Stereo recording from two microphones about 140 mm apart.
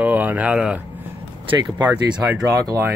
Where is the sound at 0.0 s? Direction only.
10° right (ahead or behind).